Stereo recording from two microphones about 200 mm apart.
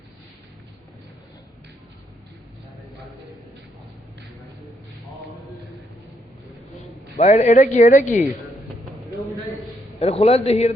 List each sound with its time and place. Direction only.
7.2 s speech: 35° left (ahead or behind)
10.0 s speech: 30° left (ahead or behind)